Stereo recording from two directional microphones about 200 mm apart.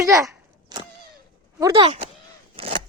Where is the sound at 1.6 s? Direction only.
20° right (ahead or behind).